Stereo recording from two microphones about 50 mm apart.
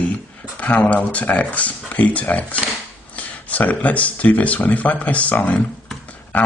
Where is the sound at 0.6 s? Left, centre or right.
Left.